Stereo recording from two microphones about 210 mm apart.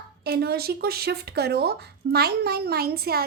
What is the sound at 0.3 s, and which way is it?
A woman's voice, 50° right (ahead or behind).